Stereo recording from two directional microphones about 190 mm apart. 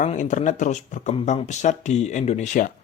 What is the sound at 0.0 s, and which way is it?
Speech, 40° left (ahead or behind).